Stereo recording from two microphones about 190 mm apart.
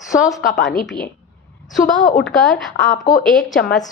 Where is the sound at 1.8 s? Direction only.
45° left (ahead or behind).